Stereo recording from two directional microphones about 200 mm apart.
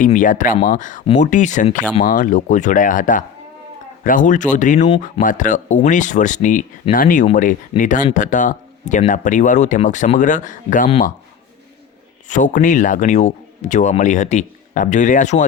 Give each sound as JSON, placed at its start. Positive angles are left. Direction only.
{"t": 0.0, "sound": "speech", "side_deg": 40}
{"t": 12.3, "sound": "speech", "side_deg": 40}